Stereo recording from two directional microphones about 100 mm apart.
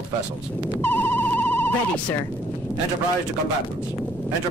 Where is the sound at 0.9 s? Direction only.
20° left (ahead or behind).